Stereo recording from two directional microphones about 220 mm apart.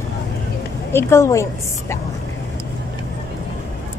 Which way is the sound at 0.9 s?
10° left (ahead or behind).